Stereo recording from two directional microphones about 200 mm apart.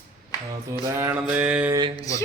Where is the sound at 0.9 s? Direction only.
10° right (ahead or behind).